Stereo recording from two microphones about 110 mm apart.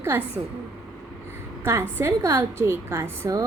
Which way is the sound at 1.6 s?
25° right (ahead or behind).